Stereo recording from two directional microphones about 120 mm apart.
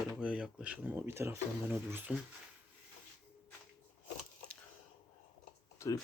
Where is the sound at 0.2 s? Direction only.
5° right (ahead or behind).